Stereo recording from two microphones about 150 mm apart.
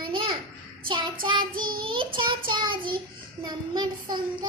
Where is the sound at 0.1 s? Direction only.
35° right (ahead or behind).